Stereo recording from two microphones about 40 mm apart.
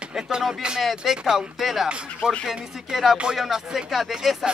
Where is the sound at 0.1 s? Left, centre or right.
Centre.